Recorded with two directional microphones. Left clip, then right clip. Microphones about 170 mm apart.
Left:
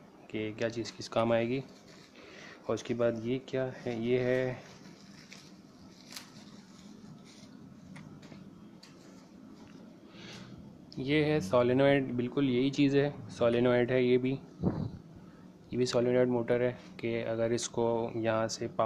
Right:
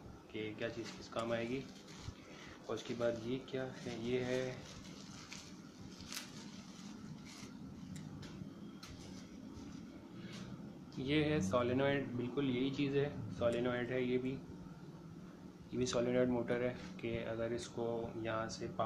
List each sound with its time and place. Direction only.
0.3 s speech: 50° left (ahead or behind)
2.7 s speech: 50° left (ahead or behind)
11.0 s speech: 35° left (ahead or behind)
12.2 s speech: 55° left (ahead or behind)
15.7 s speech: 35° left (ahead or behind); by 18.7 s 50° left (ahead or behind)